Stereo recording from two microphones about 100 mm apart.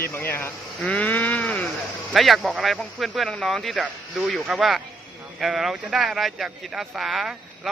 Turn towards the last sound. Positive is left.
turn(degrees=-5)  # may be behind; listen again after turning